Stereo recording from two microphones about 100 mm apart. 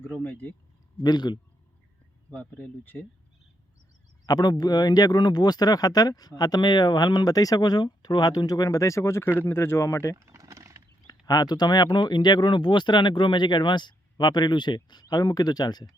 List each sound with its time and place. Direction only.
0.0 s speech: 20° left (ahead or behind)
1.0 s speech: 45° left (ahead or behind)
2.3 s speech: 15° left (ahead or behind)
4.3 s speech: 40° left (ahead or behind)
10.2 s a sound: 30° right (ahead or behind)
11.0 s speech: 40° left (ahead or behind)